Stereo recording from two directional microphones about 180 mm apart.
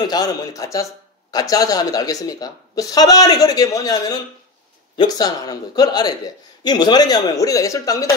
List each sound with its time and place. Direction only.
0.0 s speech: 20° left (ahead or behind)